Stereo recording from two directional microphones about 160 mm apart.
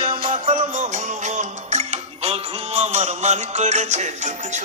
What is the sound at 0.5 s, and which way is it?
Music, 50° right (ahead or behind).